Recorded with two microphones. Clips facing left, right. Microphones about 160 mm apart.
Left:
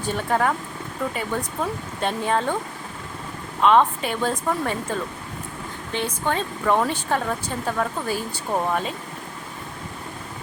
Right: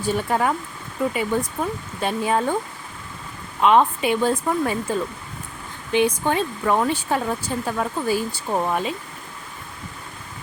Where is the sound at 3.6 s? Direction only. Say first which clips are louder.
Right 1 dB; 10° right (ahead or behind).